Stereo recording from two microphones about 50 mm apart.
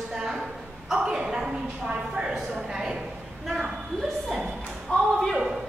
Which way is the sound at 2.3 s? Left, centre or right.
Centre.